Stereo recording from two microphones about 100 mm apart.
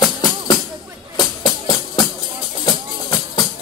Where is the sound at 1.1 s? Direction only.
40° left (ahead or behind).